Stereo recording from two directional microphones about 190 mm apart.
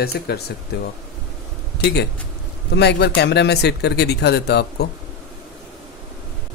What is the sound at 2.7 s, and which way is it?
Speech, 60° left (ahead or behind).